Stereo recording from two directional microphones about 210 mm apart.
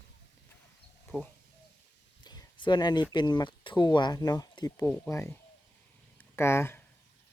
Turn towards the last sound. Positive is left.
turn(degrees=10)  # may be behind; listen again after turning